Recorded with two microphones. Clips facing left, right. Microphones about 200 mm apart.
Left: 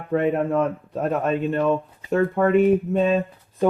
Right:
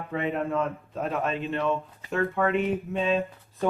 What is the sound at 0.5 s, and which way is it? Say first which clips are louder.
Speech: left 6 dB; 45° left (ahead or behind).